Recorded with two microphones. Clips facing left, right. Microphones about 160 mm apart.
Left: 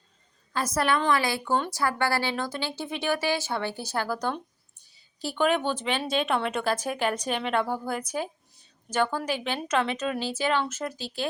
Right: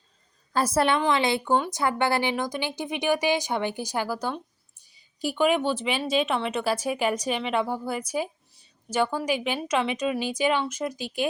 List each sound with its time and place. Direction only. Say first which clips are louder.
0.5 s a woman's voice: right 3 dB; 30° right (ahead or behind); by 11.3 s 15° right (ahead or behind)